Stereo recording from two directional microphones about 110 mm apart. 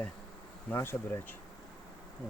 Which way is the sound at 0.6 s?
20° left (ahead or behind).